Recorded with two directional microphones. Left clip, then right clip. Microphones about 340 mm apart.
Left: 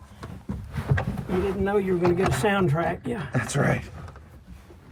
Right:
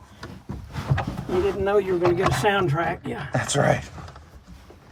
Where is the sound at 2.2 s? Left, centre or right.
Right.